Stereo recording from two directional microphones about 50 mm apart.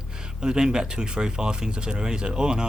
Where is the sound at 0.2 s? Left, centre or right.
Centre.